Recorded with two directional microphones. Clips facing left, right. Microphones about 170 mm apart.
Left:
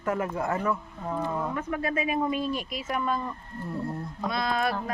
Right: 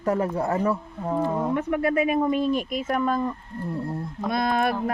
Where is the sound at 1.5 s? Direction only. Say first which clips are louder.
Right 6 dB; 65° right (ahead or behind); by 3.2 s 45° right (ahead or behind).